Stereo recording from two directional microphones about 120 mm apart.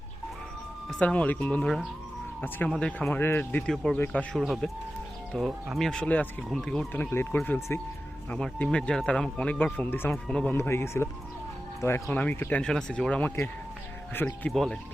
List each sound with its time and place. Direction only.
0.9 s speech: 10° left (ahead or behind)
3.2 s speech: 20° left (ahead or behind)
6.9 s speech: 20° left (ahead or behind)
14.5 s speech: centre (ahead or behind)